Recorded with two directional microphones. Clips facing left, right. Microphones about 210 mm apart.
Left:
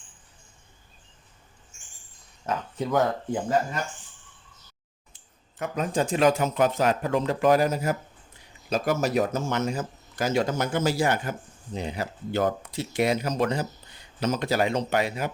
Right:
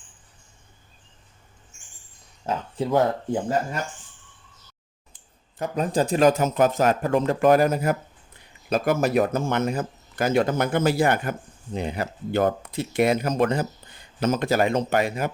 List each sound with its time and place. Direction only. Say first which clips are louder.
2.5 s speech: right 3 dB; 25° right (ahead or behind)
5.5 s speech: right 3 dB; 35° right (ahead or behind)